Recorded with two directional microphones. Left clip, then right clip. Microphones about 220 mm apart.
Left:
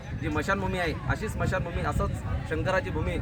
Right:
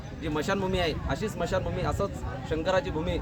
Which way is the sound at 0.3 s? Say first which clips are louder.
Even; 20° right (ahead or behind).